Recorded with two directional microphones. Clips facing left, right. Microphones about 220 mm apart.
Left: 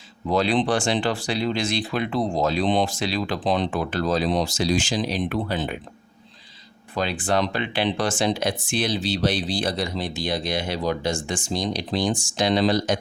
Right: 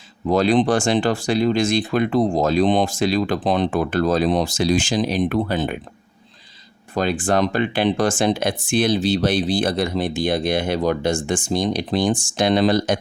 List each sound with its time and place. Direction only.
0.3 s speech: 45° right (ahead or behind)
6.9 s speech: 45° right (ahead or behind)